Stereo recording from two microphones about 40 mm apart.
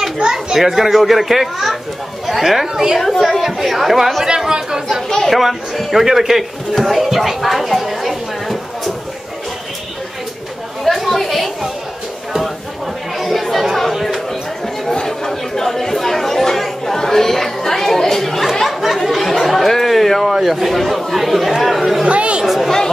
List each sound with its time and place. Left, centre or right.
0.2 s a child's voice: centre
4.5 s speech: centre
5.1 s speech: centre
10.8 s chatter: centre
13.2 s chatter: centre
14.9 s chatter: centre
22.0 s chatter: right
22.4 s chatter: centre